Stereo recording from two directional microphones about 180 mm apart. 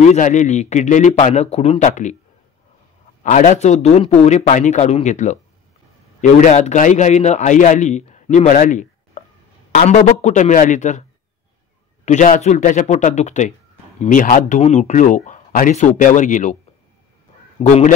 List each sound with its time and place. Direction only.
0.1 s a man's voice: 40° left (ahead or behind)
3.3 s a man's voice: 45° left (ahead or behind)
6.4 s a man's voice: 40° left (ahead or behind)
17.6 s a man's voice: 40° left (ahead or behind)